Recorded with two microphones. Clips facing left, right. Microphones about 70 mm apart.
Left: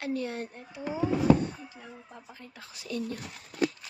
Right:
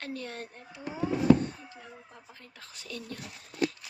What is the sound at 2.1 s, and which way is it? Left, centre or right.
Speech, centre.